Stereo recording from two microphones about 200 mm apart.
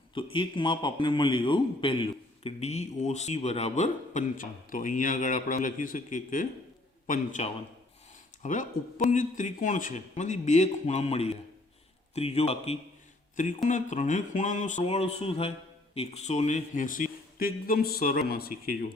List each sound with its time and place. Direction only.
0.1 s a man's voice: 25° left (ahead or behind); by 18.9 s 50° left (ahead or behind)